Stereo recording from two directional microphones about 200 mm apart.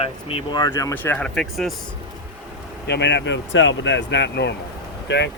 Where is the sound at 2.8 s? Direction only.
60° left (ahead or behind).